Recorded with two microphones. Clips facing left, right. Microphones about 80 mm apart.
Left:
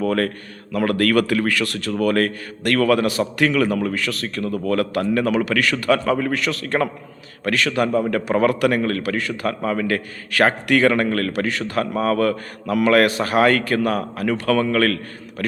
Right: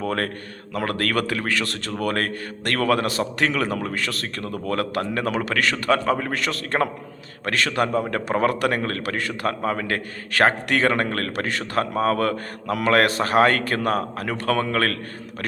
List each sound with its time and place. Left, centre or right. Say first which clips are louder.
0.0 s a man's voice: left 5 dB; right